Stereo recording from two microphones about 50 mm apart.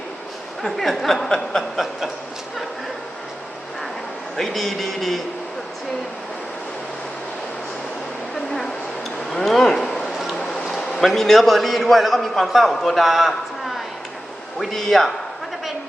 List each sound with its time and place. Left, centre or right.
0.6 s a man's voice: centre
4.4 s a man's voice: centre
9.3 s a sound: centre
11.0 s a man's voice: centre